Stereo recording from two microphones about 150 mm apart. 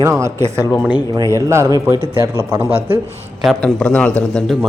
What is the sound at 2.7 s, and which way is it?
Speech, 35° right (ahead or behind).